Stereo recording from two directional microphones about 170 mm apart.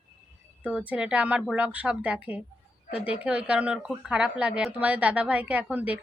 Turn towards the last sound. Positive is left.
turn(degrees=-10)  # may be behind; listen again after turning